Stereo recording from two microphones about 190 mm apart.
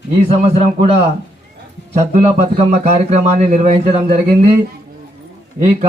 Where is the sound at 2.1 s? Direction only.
55° right (ahead or behind).